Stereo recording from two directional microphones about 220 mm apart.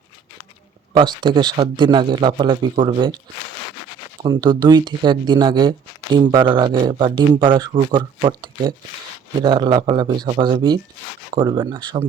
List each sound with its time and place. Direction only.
0.9 s speech: 20° right (ahead or behind)
4.2 s speech: 20° right (ahead or behind)